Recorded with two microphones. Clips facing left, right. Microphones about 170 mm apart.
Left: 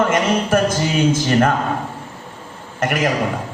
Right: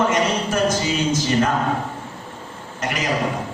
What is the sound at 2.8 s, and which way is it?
Speech, 55° left (ahead or behind).